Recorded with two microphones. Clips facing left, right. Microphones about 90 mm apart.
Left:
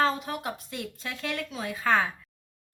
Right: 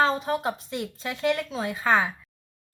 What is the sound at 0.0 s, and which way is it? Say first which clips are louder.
A woman's voice: right 4 dB; 30° right (ahead or behind).